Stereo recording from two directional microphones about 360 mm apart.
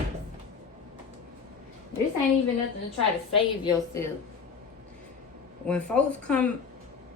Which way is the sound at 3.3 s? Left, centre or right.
Centre.